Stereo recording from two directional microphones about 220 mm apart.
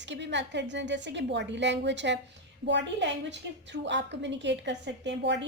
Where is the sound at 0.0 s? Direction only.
55° right (ahead or behind).